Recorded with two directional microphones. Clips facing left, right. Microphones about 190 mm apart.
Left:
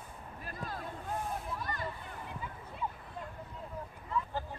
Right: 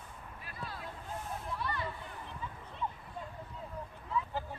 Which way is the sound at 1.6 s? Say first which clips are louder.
Right 1 dB; 45° left (ahead or behind).